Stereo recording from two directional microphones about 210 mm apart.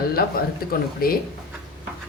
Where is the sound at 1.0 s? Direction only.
45° left (ahead or behind).